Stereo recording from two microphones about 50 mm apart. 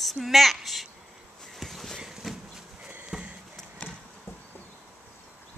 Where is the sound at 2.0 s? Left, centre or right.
Centre.